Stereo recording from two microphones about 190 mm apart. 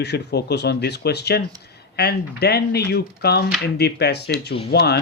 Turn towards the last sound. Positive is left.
turn(degrees=60)  # may be behind; listen again after turning